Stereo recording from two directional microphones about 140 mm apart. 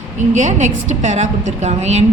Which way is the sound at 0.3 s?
60° right (ahead or behind).